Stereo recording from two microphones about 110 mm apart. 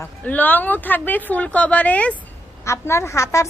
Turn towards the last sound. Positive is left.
turn(degrees=30)  # may be behind; listen again after turning